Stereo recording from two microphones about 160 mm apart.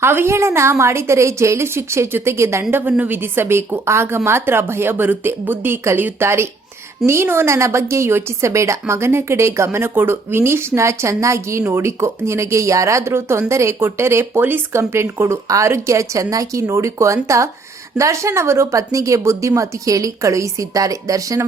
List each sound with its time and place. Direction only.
0.0 s a woman's voice: 15° right (ahead or behind)